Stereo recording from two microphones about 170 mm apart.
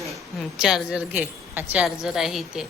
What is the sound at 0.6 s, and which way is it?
A woman's voice, 5° right (ahead or behind).